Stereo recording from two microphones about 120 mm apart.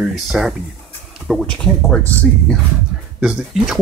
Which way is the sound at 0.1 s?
5° right (ahead or behind).